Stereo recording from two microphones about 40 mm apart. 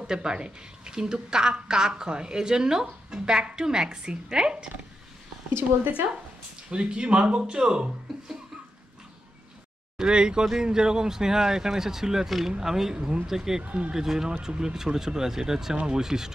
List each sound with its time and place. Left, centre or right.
0.0 s a woman's voice: centre
6.7 s speech: right
9.9 s a woman's voice: right
12.9 s a woman's voice: right
13.7 s speech: right
13.9 s a woman's voice: centre